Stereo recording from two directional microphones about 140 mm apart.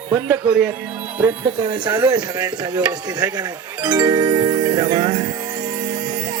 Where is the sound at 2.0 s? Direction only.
25° right (ahead or behind).